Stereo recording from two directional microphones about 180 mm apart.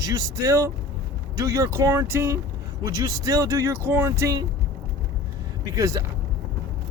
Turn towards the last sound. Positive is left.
turn(degrees=-20)  # may be behind; listen again after turning